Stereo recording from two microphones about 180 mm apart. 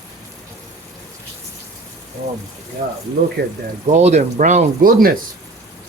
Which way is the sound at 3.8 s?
40° right (ahead or behind).